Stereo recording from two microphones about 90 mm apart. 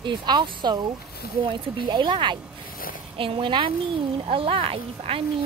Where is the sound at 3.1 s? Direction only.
75° right (ahead or behind).